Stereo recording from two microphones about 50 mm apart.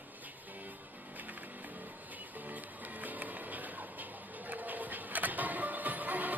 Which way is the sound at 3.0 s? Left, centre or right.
Right.